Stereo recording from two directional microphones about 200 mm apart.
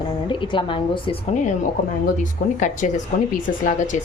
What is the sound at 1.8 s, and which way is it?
Speech, 40° left (ahead or behind).